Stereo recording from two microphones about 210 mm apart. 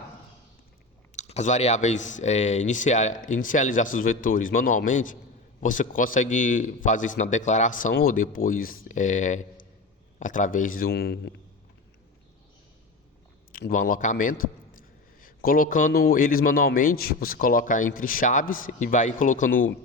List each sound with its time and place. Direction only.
1.1 s a man's voice: 35° left (ahead or behind); by 11.3 s 50° left (ahead or behind)
13.5 s a man's voice: 40° left (ahead or behind)